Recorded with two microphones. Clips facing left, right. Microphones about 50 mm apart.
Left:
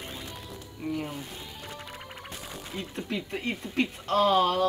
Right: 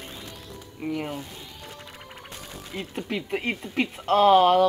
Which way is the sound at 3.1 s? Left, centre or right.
Right.